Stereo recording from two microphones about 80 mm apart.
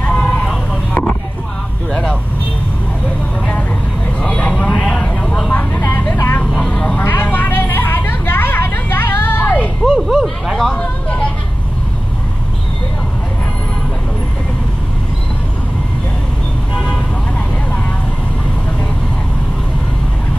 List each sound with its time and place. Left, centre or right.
0.0 s vehicle: centre
1.9 s vehicle: centre
4.2 s vehicle: centre
5.5 s vehicle: left
6.4 s vehicle: centre
9.8 s a sound: centre
10.8 s vehicle: centre